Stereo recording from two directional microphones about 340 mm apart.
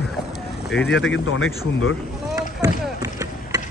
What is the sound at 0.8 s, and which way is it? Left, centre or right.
Speech, left.